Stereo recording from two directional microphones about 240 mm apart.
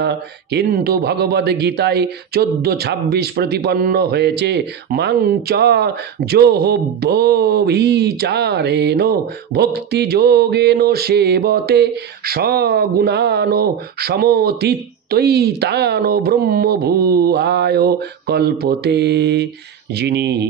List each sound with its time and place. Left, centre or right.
0.0 s a man's voice: right